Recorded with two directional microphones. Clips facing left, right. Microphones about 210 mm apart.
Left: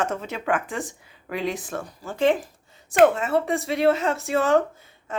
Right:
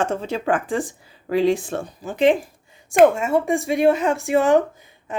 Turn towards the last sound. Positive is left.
turn(degrees=-15)  # may be behind; listen again after turning